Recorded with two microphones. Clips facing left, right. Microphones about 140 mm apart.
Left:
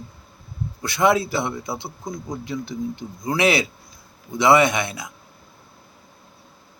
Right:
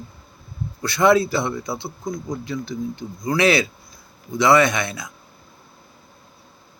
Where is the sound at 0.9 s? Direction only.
15° left (ahead or behind).